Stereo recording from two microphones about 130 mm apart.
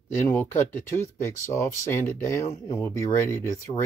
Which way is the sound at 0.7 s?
15° left (ahead or behind).